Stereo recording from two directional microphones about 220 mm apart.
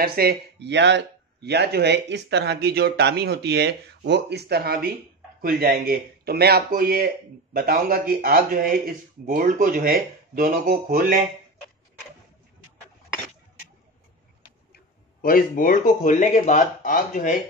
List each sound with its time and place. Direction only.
0.0 s speech: 45° right (ahead or behind)
15.2 s speech: 40° left (ahead or behind)